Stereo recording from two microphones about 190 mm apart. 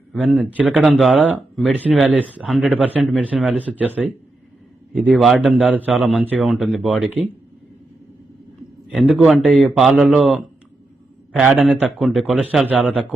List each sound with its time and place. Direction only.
0.1 s speech: centre (ahead or behind)
8.9 s speech: centre (ahead or behind)